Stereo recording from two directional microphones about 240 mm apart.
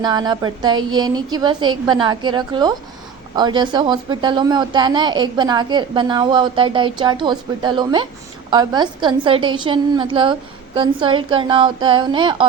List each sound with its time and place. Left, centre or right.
0.0 s a woman's voice: centre